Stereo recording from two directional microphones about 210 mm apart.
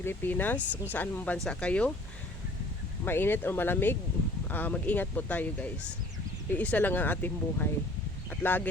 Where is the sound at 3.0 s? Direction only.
10° left (ahead or behind).